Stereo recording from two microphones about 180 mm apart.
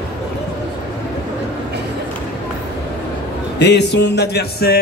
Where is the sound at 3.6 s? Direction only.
70° left (ahead or behind).